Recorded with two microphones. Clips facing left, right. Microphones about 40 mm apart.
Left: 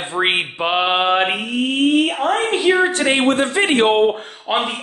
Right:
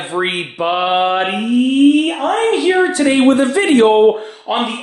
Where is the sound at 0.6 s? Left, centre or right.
Left.